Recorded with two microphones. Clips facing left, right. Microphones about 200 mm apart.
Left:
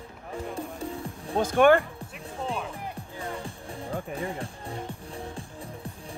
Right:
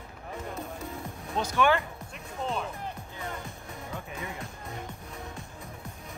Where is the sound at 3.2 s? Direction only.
30° left (ahead or behind).